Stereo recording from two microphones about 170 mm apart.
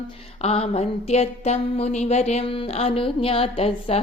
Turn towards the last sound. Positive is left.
turn(degrees=35)  # may be behind; listen again after turning